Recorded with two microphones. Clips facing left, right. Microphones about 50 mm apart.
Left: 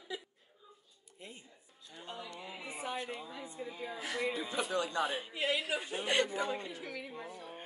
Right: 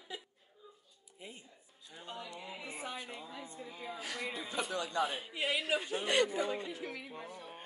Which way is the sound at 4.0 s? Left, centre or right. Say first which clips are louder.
Left 5 dB; centre.